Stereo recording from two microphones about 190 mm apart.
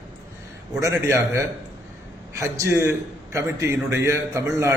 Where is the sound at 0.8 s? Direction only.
15° right (ahead or behind).